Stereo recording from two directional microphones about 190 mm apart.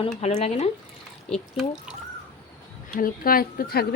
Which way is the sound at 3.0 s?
50° left (ahead or behind).